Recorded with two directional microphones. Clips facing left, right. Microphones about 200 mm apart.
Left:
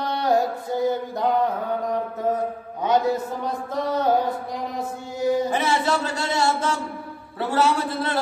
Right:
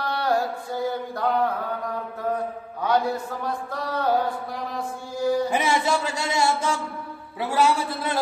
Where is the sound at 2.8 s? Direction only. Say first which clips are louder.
Left 2 dB; 20° left (ahead or behind).